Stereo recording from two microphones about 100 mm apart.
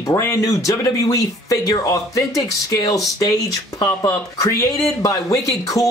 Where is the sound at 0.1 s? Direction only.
30° left (ahead or behind).